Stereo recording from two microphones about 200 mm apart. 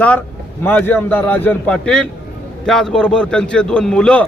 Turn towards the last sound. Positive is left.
turn(degrees=5)  # may be behind; listen again after turning